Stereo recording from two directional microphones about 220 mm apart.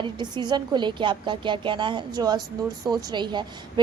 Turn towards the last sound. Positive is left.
turn(degrees=-20)  # may be behind; listen again after turning